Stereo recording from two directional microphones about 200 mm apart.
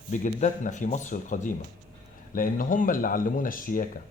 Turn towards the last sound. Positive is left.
turn(degrees=45)  # may be behind; listen again after turning